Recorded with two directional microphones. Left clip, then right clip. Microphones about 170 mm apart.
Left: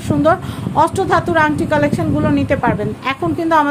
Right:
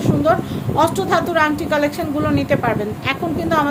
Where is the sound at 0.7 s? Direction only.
35° left (ahead or behind).